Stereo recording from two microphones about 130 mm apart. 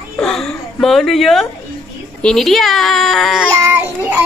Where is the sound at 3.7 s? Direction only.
15° right (ahead or behind).